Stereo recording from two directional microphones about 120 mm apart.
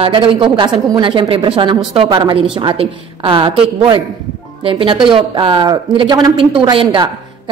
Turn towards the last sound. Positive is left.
turn(degrees=-40)  # may be behind; listen again after turning